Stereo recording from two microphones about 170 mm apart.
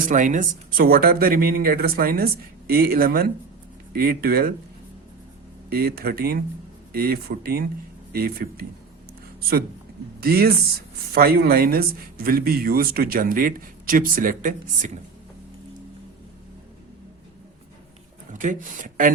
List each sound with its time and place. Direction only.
0.1 s speech: 50° right (ahead or behind)
5.7 s speech: 65° right (ahead or behind)
10.2 s speech: 65° right (ahead or behind)
18.3 s speech: 50° right (ahead or behind)